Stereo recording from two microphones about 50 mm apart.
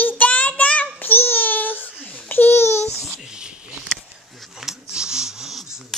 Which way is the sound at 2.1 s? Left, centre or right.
Left.